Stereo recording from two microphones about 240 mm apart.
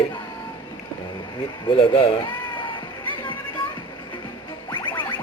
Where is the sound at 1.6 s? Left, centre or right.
Left.